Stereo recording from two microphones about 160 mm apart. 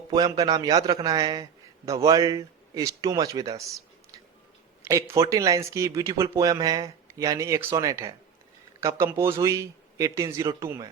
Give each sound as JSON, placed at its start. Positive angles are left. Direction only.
{"t": 0.1, "sound": "a man's voice", "side_deg": -25}
{"t": 4.8, "sound": "a man's voice", "side_deg": -20}